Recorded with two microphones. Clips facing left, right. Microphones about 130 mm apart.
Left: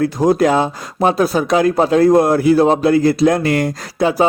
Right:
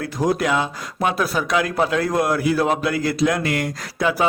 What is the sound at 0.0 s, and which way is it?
Speech, 30° left (ahead or behind).